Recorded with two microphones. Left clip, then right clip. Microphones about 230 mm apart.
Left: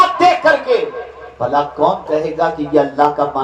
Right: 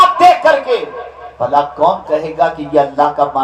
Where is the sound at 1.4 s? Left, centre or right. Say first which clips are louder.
Right 3 dB; right.